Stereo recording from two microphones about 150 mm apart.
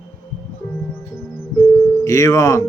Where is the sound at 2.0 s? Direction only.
20° left (ahead or behind).